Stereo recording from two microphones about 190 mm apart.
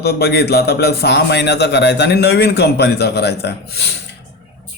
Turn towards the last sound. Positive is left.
turn(degrees=60)  # may be behind; listen again after turning